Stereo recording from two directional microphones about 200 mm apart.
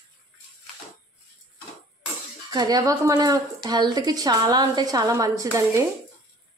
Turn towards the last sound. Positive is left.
turn(degrees=-15)  # may be behind; listen again after turning